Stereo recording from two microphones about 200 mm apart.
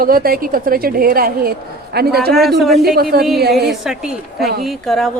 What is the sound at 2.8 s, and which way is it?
Speech, 50° right (ahead or behind).